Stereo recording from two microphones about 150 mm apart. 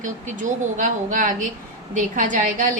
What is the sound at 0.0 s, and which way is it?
A woman's voice, 55° right (ahead or behind).